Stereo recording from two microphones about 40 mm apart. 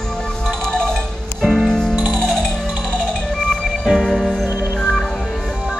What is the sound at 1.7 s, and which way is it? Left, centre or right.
Music, centre.